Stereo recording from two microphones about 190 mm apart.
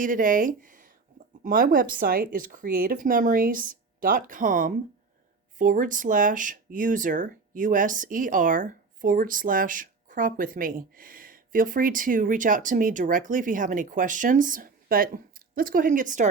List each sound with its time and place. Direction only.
0.0 s speech: 45° right (ahead or behind)